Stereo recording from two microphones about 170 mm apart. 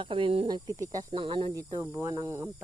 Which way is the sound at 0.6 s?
20° right (ahead or behind).